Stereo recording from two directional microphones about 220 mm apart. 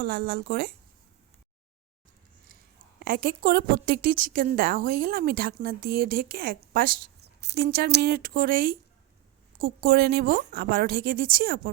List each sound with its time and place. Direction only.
0.0 s a woman's voice: 45° right (ahead or behind)
3.0 s a woman's voice: 45° right (ahead or behind)